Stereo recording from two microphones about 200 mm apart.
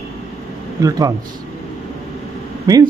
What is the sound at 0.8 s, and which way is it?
Speech, 15° right (ahead or behind).